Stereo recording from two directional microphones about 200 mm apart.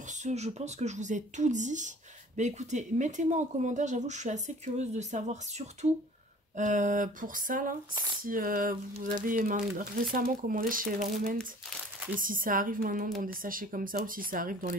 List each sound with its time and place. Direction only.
0.2 s speech: 35° right (ahead or behind)